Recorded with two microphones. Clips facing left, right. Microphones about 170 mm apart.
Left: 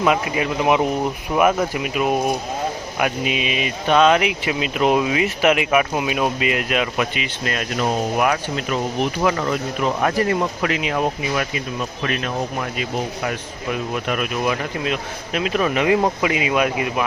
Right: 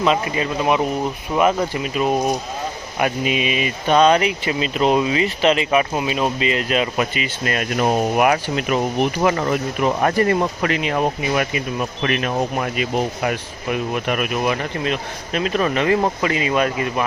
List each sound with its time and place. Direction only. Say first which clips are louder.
0.0 s speech: even; 10° left (ahead or behind)
7.5 s speech: right 3 dB; 50° right (ahead or behind)
8.7 s speech: right 3 dB; 10° right (ahead or behind)
10.0 s speech: right 2 dB; centre (ahead or behind)
10.9 s speech: right 2 dB; 5° right (ahead or behind)
12.0 s speech: right 3 dB; 60° right (ahead or behind)
12.8 s speech: right 4 dB; 10° right (ahead or behind); by 16.9 s 10° left (ahead or behind)